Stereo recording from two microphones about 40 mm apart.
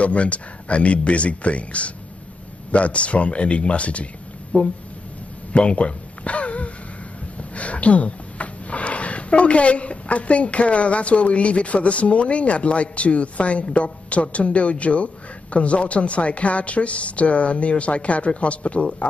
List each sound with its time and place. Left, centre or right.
0.0 s speech: left
5.5 s a sound: left
7.5 s speech: left